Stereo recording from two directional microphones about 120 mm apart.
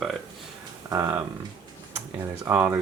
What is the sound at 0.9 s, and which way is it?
Speech, 20° right (ahead or behind).